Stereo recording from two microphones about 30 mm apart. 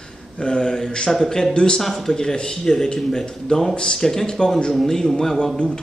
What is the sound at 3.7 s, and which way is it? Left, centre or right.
Speech, left.